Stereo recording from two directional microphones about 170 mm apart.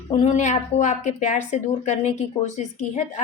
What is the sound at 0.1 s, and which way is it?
A woman's voice, 45° left (ahead or behind).